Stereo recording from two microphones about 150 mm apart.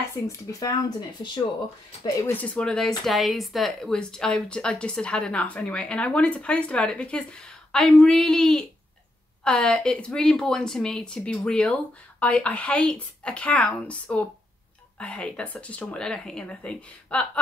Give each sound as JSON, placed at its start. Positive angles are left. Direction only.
{"t": 0.3, "sound": "speech", "side_deg": 25}
{"t": 2.2, "sound": "speech", "side_deg": 10}